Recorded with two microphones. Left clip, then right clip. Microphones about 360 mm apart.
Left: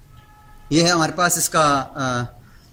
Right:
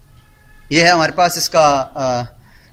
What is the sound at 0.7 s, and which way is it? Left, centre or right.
A man's voice, right.